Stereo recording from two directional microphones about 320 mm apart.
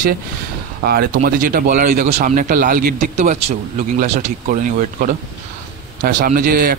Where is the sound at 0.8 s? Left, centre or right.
Right.